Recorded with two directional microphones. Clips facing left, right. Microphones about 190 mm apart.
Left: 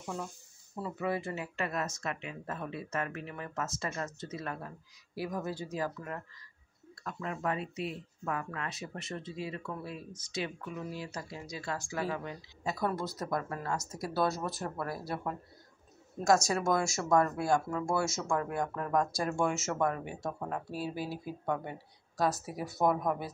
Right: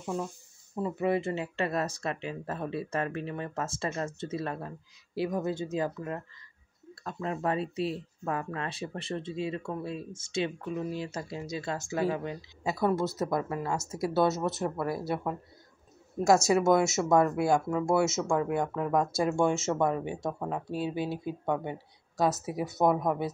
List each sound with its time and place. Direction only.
0.0 s speech: 15° right (ahead or behind)